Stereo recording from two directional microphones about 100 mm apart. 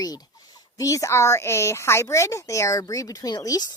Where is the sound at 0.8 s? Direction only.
35° left (ahead or behind).